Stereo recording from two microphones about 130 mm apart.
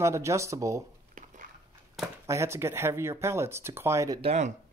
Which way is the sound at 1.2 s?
90° right.